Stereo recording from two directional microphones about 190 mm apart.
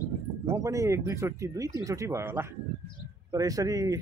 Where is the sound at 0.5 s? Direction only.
15° right (ahead or behind).